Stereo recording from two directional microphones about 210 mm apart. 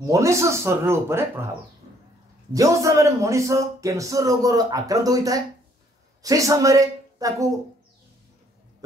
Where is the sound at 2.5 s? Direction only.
15° right (ahead or behind).